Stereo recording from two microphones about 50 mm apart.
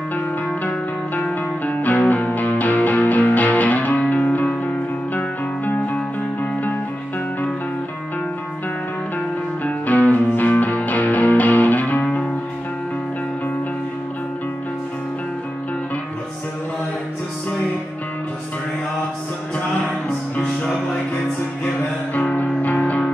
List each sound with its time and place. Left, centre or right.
1.7 s music: left
9.7 s music: left
20.4 s music: centre
22.1 s music: left